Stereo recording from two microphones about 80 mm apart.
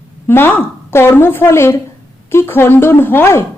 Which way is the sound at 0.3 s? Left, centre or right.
Left.